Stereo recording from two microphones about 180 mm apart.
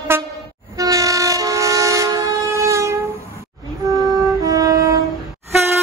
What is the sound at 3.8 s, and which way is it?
Music, 20° right (ahead or behind).